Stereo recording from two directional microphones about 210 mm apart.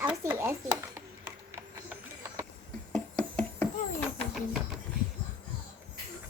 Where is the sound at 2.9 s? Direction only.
5° left (ahead or behind).